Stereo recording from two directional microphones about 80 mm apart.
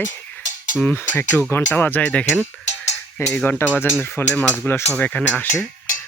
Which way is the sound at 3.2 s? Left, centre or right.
Left.